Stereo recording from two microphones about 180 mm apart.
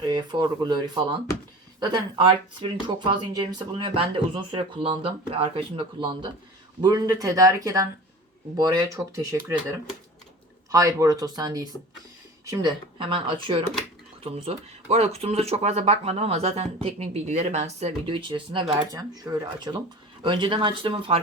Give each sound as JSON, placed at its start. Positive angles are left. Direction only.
{"t": 0.0, "sound": "speech", "side_deg": -25}
{"t": 10.7, "sound": "speech", "side_deg": -20}